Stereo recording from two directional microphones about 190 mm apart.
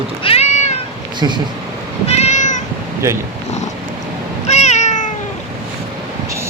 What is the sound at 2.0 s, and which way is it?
Cat, 35° left (ahead or behind).